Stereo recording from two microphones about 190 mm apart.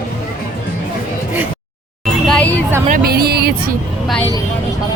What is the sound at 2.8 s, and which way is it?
Speech, 50° right (ahead or behind).